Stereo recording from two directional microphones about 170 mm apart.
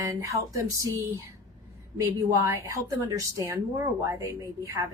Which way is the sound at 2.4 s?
15° right (ahead or behind).